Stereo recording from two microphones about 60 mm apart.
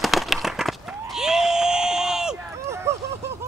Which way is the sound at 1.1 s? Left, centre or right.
Centre.